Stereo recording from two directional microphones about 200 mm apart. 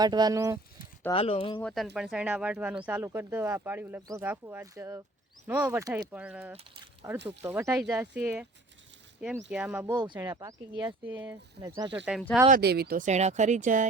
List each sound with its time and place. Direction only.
0.0 s speech: 20° right (ahead or behind)
1.1 s speech: 30° left (ahead or behind)
1.6 s speech: centre (ahead or behind)
9.5 s speech: 5° right (ahead or behind)
9.9 s speech: 20° right (ahead or behind)
11.9 s speech: 5° right (ahead or behind)
12.5 s speech: 50° right (ahead or behind)